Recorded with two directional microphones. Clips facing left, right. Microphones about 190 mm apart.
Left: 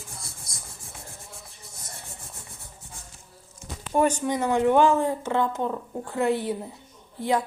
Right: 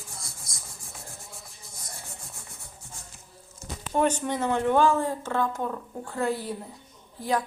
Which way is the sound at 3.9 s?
10° left (ahead or behind).